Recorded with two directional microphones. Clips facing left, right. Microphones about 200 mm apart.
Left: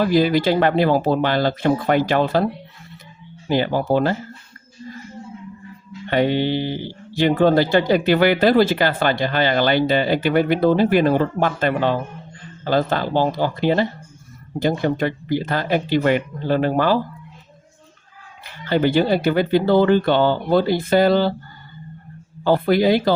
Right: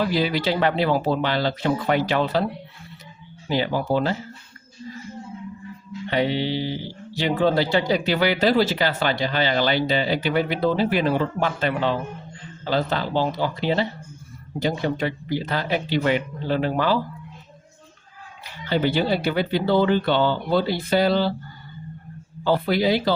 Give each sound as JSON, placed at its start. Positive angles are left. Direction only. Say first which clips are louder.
{"t": 0.0, "sound": "speech", "louder": "left 6 dB", "side_deg": 45}
{"t": 3.5, "sound": "speech", "louder": "left 4 dB", "side_deg": 50}
{"t": 6.1, "sound": "speech", "louder": "left 4 dB", "side_deg": 55}
{"t": 18.4, "sound": "speech", "louder": "left 4 dB", "side_deg": 50}
{"t": 22.4, "sound": "speech", "louder": "left 4 dB", "side_deg": 50}